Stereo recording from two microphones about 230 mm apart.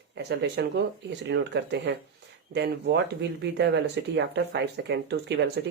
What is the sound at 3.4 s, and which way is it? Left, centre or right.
Speech, right.